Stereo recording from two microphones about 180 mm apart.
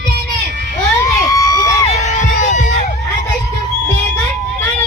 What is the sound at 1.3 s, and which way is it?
Crowd, 20° left (ahead or behind).